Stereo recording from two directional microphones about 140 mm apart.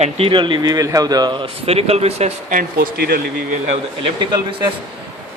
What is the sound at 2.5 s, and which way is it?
Speech, 80° right.